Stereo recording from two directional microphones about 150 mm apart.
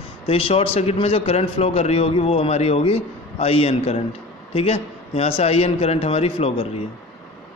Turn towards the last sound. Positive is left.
turn(degrees=40)  # may be behind; listen again after turning